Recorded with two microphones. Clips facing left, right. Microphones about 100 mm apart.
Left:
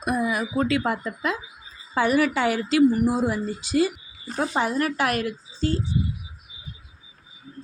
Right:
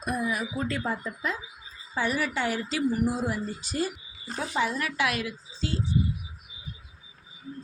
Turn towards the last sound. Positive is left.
turn(degrees=45)  # may be behind; listen again after turning